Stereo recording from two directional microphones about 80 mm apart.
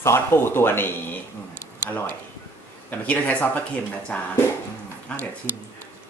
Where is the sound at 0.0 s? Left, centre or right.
Left.